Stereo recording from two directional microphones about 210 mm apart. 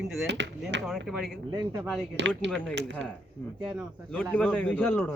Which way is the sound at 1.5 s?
20° right (ahead or behind).